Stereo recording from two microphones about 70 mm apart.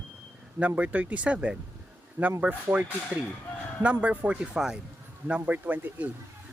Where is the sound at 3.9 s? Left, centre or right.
Right.